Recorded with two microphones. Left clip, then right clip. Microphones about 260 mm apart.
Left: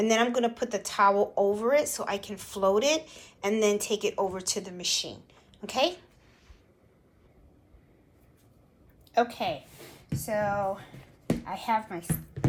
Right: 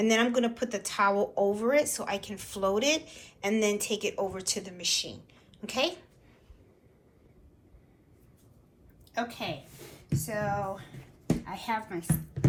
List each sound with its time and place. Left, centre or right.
0.0 s a woman's voice: centre
9.1 s speech: left